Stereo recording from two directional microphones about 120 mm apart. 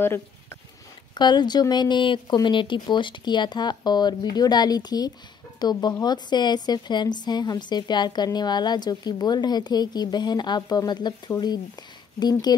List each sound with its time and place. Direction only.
0.0 s speech: 20° left (ahead or behind)
1.1 s a woman's voice: 35° left (ahead or behind)